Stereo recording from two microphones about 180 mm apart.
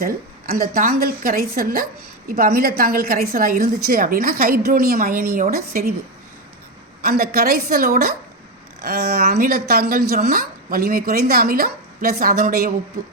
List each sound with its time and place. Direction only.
0.0 s a woman's voice: 55° right (ahead or behind)
7.0 s a woman's voice: 55° right (ahead or behind)